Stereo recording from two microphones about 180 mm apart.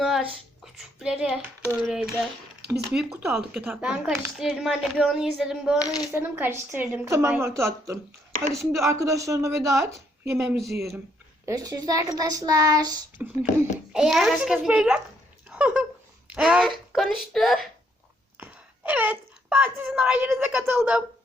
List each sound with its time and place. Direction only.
0.0 s a sound: centre (ahead or behind)
1.8 s speech: 5° right (ahead or behind)
5.8 s speech: 20° left (ahead or behind)
6.1 s a woman's voice: 10° right (ahead or behind)
10.4 s speech: centre (ahead or behind)
10.7 s speech: 60° right (ahead or behind)
11.4 s child singing: 20° right (ahead or behind)
13.2 s a woman's voice: 10° right (ahead or behind)